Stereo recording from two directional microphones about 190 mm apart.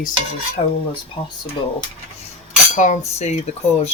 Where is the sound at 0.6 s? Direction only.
35° left (ahead or behind).